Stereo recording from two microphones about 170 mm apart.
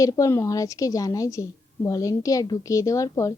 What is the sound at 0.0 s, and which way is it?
A woman's voice, 20° left (ahead or behind).